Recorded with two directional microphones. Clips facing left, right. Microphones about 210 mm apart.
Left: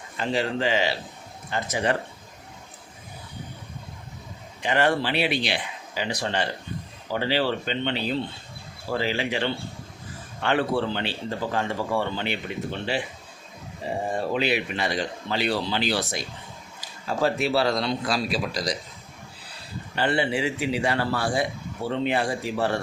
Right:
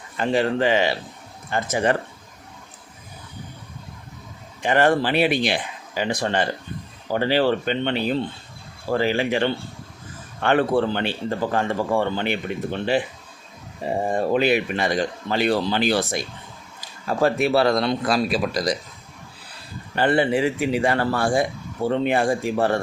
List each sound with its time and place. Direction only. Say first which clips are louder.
0.2 s a man's voice: right 5 dB; 55° right (ahead or behind)
4.6 s a man's voice: right 4 dB; 50° right (ahead or behind)
14.1 s a man's voice: right 6 dB; 50° right (ahead or behind)
20.0 s a man's voice: right 5 dB; 50° right (ahead or behind)